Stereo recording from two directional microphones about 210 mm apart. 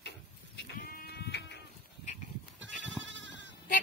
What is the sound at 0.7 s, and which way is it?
Sheep, 45° left (ahead or behind).